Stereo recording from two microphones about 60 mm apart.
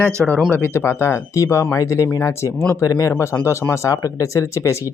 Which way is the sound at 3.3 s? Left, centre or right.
Left.